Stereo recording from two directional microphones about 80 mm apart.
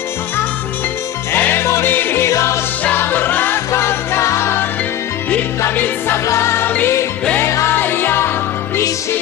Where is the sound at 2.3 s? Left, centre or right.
Left.